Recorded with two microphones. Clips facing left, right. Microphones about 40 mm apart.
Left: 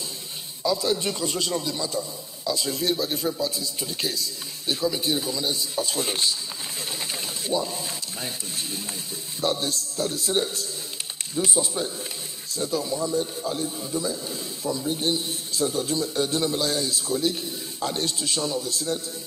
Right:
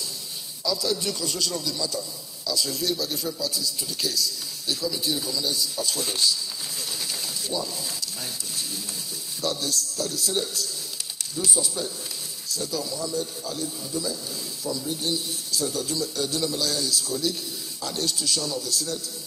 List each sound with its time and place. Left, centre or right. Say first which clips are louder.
0.7 s a man's voice: left 3 dB; left
7.1 s pigeon: left 6 dB; left
9.4 s a man's voice: left 2 dB; left